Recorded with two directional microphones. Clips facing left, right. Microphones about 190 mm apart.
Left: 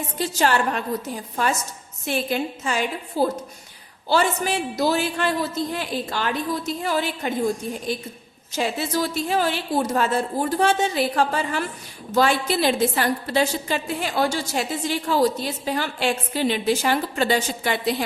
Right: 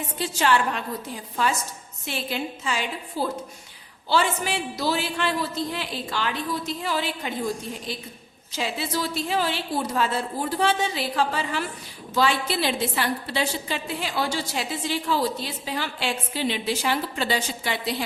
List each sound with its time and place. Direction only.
0.2 s a woman's voice: 40° left (ahead or behind)